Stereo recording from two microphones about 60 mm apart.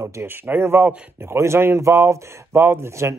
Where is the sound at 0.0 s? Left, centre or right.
Right.